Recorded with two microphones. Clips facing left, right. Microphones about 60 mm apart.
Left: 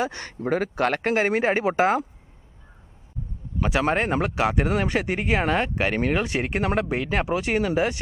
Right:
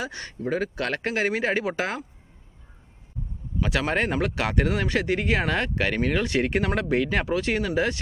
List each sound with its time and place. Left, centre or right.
0.0 s speech: left
3.6 s speech: left
6.2 s speech: centre